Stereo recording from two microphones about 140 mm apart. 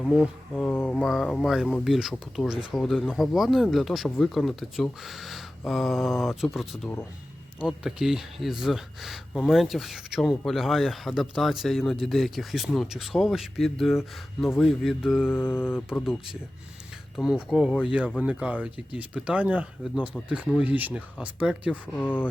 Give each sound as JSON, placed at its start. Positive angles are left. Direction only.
{"t": 0.0, "sound": "speech", "side_deg": 0}
{"t": 0.7, "sound": "mantra", "side_deg": 10}
{"t": 1.1, "sound": "speech", "side_deg": 0}
{"t": 15.3, "sound": "mantra", "side_deg": 15}
{"t": 16.0, "sound": "speech", "side_deg": -5}
{"t": 21.9, "sound": "mantra", "side_deg": 10}